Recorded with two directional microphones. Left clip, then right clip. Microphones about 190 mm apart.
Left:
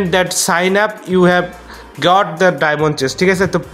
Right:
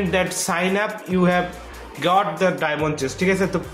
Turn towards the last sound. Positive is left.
turn(degrees=50)  # may be behind; listen again after turning